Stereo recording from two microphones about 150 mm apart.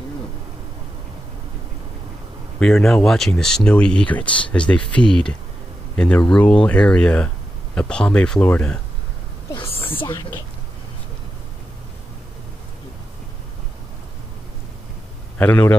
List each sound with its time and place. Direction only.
2.6 s speech: centre (ahead or behind)
10.0 s speech: 20° left (ahead or behind)
15.3 s a man's voice: 10° left (ahead or behind)